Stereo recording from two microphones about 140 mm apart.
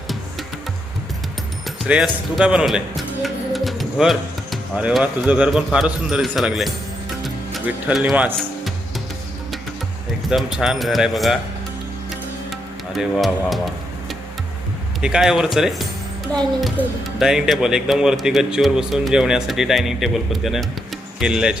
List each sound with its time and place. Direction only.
1.6 s speech: centre (ahead or behind)
10.2 s speech: 5° right (ahead or behind)
13.0 s speech: centre (ahead or behind)
15.0 s speech: 5° right (ahead or behind)